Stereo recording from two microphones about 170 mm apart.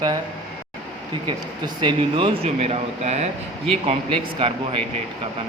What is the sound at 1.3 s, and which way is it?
Speech, 30° right (ahead or behind).